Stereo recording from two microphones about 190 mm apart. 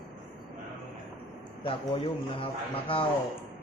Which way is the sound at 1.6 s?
30° left (ahead or behind).